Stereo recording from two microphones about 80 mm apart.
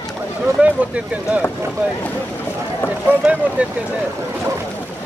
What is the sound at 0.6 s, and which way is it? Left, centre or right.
Speech, centre.